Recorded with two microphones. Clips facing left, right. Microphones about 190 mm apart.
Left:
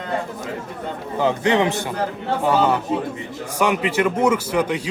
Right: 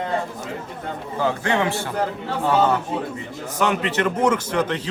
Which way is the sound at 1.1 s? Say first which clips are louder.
Left 4 dB; 20° left (ahead or behind).